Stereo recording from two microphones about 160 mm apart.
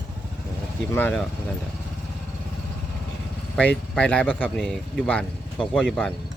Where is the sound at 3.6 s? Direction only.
10° left (ahead or behind).